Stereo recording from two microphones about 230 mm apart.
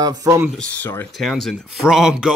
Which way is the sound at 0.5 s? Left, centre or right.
Centre.